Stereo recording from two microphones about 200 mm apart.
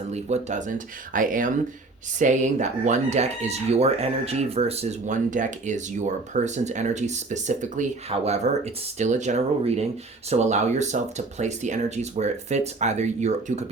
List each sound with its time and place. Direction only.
0.1 s speech: 35° right (ahead or behind)